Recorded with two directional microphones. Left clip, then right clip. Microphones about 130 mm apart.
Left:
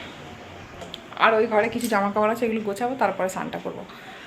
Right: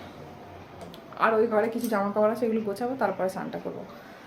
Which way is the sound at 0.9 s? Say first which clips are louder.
Left 5 dB; 5° right (ahead or behind).